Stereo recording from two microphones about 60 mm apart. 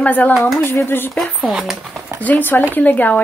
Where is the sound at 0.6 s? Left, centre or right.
Left.